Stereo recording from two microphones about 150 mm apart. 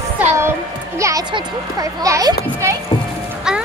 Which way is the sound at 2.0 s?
25° right (ahead or behind).